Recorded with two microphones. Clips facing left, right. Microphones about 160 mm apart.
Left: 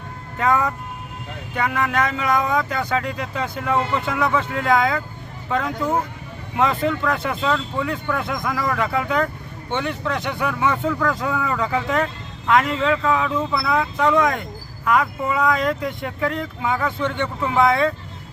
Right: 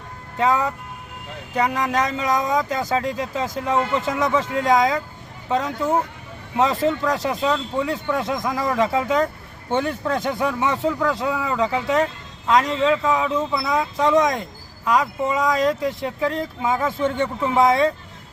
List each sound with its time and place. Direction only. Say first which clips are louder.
0.3 s speech: even; 25° right (ahead or behind)
1.6 s speech: left 1 dB; 20° right (ahead or behind)
1.9 s speech: even; 35° right (ahead or behind)
7.4 s speech: even; 20° right (ahead or behind)
9.7 s speech: right 2 dB; 35° right (ahead or behind)
10.4 s speech: left 2 dB; 25° right (ahead or behind)